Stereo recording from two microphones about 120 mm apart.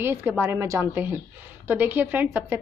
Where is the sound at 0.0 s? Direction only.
20° right (ahead or behind).